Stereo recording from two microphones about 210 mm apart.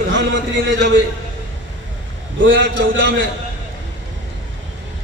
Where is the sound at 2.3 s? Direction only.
60° right (ahead or behind).